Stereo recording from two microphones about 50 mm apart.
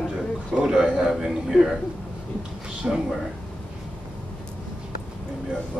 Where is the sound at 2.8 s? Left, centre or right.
Right.